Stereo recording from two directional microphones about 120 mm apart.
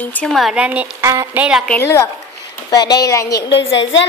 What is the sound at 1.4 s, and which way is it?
Speech, 10° right (ahead or behind).